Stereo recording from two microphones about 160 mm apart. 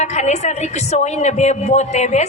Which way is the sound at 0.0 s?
45° left (ahead or behind).